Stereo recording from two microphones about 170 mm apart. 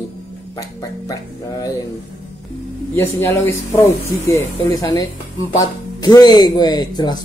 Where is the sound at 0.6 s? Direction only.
20° left (ahead or behind).